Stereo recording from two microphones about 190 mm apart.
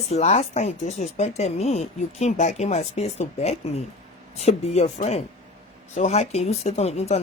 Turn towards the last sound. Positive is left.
turn(degrees=35)  # may be behind; listen again after turning